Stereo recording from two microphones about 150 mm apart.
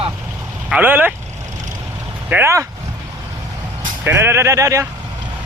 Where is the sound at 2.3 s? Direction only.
20° right (ahead or behind).